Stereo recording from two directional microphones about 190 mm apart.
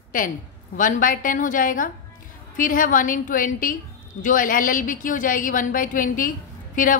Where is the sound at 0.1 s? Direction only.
45° left (ahead or behind).